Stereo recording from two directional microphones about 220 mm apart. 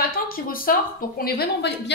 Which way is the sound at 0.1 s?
40° left (ahead or behind).